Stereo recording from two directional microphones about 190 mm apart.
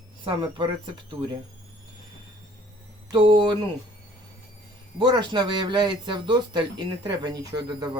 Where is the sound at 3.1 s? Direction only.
25° right (ahead or behind).